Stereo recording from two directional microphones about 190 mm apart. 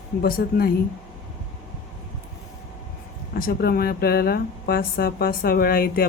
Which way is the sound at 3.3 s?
50° left (ahead or behind).